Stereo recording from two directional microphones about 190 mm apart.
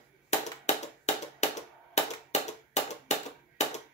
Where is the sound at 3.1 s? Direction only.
35° left (ahead or behind).